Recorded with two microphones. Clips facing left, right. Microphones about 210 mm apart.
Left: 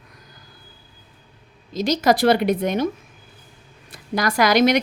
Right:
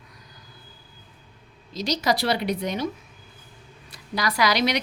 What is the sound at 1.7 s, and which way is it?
A woman's voice, 50° left (ahead or behind).